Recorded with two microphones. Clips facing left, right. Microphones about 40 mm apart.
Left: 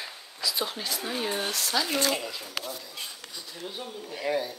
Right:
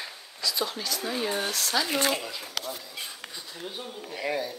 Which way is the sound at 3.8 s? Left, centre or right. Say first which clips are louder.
Even; centre.